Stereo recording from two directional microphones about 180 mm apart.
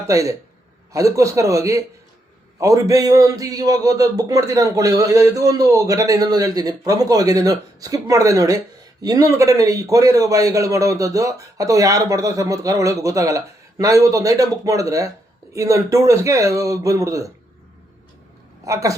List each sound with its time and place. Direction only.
0.1 s a man's voice: 20° right (ahead or behind)
18.6 s speech: 15° right (ahead or behind)